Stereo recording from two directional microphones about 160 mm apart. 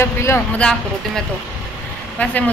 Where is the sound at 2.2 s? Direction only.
10° left (ahead or behind).